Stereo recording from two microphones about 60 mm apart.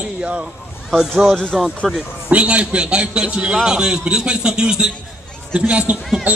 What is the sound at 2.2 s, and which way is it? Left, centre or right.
A man's voice, right.